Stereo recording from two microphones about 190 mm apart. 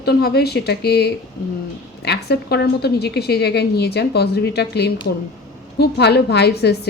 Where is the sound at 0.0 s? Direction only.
55° left (ahead or behind).